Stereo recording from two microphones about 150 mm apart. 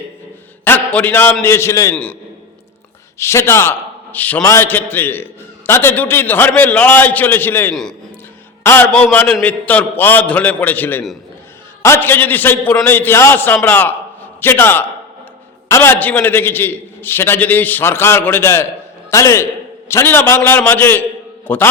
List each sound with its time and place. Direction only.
0.6 s a man's voice: 10° left (ahead or behind)
3.2 s a man's voice: 15° left (ahead or behind)